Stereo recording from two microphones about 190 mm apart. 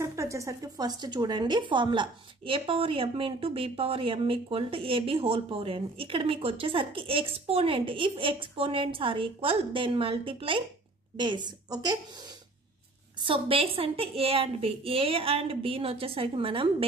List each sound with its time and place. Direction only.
0.0 s a woman's voice: 15° right (ahead or behind)
13.2 s a woman's voice: 30° right (ahead or behind)